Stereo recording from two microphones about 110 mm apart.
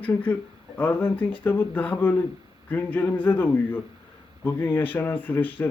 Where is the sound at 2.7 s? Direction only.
15° left (ahead or behind).